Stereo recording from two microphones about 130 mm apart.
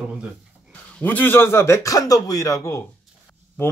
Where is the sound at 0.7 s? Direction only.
10° left (ahead or behind).